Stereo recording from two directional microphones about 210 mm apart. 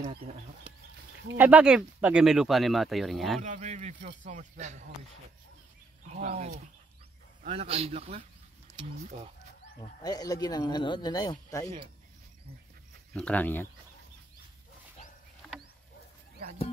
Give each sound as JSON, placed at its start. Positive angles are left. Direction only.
{"t": 1.4, "sound": "speech", "side_deg": -5}
{"t": 3.4, "sound": "speech", "side_deg": -35}
{"t": 6.0, "sound": "a man's voice", "side_deg": -30}
{"t": 9.8, "sound": "speech", "side_deg": 20}
{"t": 13.1, "sound": "speech", "side_deg": 5}